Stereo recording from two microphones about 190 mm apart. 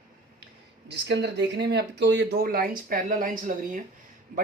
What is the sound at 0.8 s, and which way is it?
Speech, 65° right (ahead or behind).